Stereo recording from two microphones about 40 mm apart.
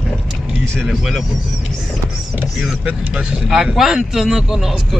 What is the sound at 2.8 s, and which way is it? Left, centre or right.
Speech, right.